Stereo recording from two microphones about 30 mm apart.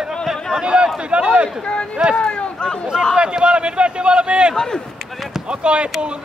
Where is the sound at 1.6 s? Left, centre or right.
Left.